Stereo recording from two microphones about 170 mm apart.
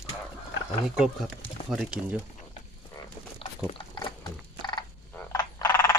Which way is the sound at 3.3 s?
30° left (ahead or behind).